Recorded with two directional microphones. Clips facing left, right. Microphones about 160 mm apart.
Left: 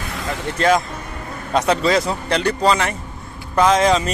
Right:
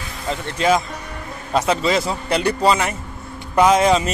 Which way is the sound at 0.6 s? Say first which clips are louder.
Left 1 dB; 5° right (ahead or behind).